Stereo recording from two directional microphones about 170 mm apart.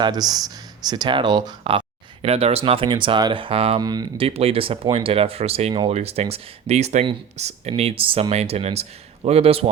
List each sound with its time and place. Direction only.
0.0 s speech: 25° right (ahead or behind)
3.8 s speech: 25° right (ahead or behind)
4.3 s speech: 35° right (ahead or behind)